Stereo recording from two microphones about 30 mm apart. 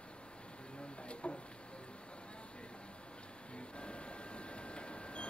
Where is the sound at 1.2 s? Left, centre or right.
Left.